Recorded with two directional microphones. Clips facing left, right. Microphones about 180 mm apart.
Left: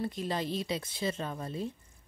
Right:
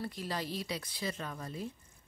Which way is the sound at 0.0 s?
20° left (ahead or behind).